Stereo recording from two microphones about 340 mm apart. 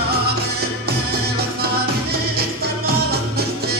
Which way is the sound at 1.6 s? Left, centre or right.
Right.